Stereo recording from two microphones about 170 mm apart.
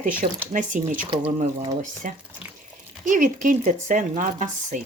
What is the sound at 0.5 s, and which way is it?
A woman's voice, 50° right (ahead or behind).